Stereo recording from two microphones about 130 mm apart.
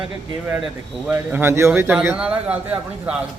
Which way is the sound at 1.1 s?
15° right (ahead or behind).